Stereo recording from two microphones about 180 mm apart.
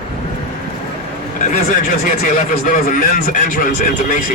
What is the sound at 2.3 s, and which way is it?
Speech, 50° left (ahead or behind).